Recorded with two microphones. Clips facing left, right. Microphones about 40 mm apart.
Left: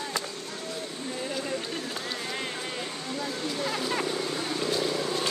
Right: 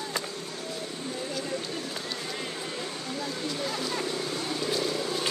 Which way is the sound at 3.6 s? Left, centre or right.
Centre.